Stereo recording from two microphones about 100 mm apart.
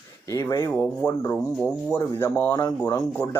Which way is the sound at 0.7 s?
20° left (ahead or behind).